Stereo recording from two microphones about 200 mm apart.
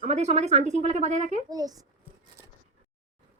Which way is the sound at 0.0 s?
35° right (ahead or behind).